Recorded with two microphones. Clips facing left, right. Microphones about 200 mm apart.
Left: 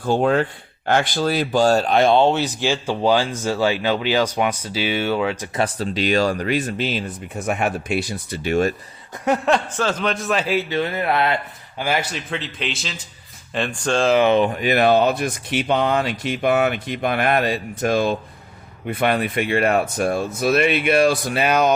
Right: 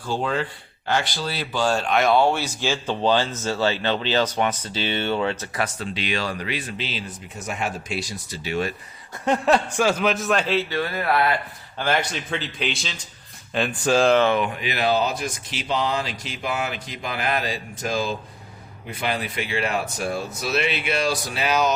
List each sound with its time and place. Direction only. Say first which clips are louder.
0.0 s speech: left 7 dB; 55° left (ahead or behind); by 5.5 s 10° left (ahead or behind)
5.5 s speech: left 5 dB; 35° left (ahead or behind)
9.5 s speech: even; 10° right (ahead or behind); by 11.3 s 20° left (ahead or behind)
11.8 s a man's voice: left 1 dB; 5° left (ahead or behind)
14.5 s speech: left 6 dB; 50° left (ahead or behind)